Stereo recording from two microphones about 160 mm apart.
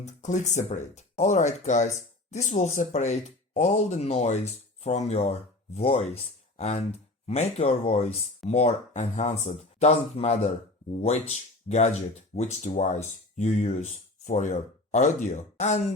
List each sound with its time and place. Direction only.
0.0 s speech: 50° left (ahead or behind)